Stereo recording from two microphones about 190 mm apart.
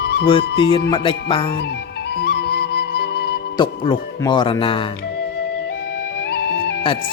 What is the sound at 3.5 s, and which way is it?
Speech, 25° left (ahead or behind).